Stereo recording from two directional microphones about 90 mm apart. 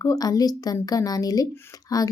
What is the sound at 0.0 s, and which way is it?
A woman's voice, 40° left (ahead or behind).